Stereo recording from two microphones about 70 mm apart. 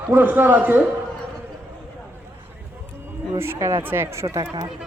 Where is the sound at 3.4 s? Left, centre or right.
Right.